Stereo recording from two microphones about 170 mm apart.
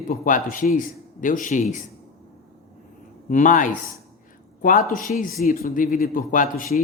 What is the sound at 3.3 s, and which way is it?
A man's voice, 50° left (ahead or behind).